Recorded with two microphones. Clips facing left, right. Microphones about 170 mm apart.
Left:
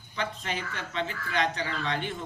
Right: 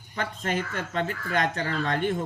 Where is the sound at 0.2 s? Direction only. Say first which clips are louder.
Right 4 dB; 45° right (ahead or behind).